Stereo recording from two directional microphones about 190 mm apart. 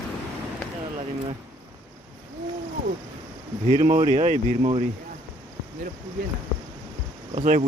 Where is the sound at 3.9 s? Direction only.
40° right (ahead or behind).